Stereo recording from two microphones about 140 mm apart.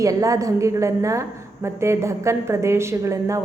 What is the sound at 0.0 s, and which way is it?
A woman's voice, 25° right (ahead or behind).